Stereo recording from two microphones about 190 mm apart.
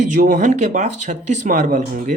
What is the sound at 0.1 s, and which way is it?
Speech, 45° right (ahead or behind).